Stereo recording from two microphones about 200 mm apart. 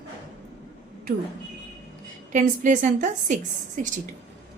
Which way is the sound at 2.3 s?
40° right (ahead or behind).